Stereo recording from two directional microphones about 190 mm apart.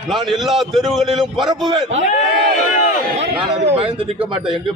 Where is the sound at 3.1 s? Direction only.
35° right (ahead or behind).